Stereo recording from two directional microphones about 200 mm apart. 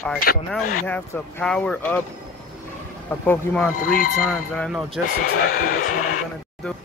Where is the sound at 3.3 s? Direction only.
10° left (ahead or behind).